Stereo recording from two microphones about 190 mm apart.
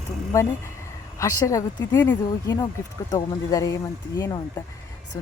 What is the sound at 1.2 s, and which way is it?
Speech, 15° left (ahead or behind).